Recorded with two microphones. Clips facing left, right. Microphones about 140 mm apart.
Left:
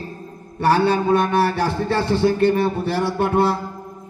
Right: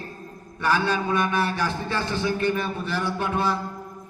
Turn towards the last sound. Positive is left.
turn(degrees=65)  # may be behind; listen again after turning